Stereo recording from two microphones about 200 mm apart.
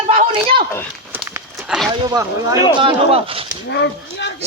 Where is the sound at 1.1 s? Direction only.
10° right (ahead or behind).